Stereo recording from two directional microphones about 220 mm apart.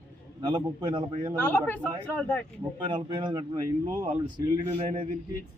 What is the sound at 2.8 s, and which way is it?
Speech, 20° right (ahead or behind).